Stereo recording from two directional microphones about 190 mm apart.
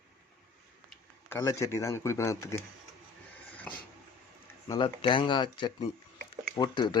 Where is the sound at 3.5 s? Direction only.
5° left (ahead or behind).